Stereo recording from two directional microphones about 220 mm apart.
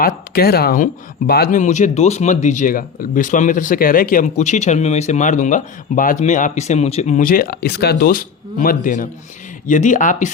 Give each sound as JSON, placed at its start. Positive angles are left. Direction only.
{"t": 0.3, "sound": "speech", "side_deg": 45}